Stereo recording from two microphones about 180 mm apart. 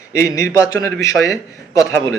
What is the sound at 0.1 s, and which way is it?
Speech, 15° left (ahead or behind).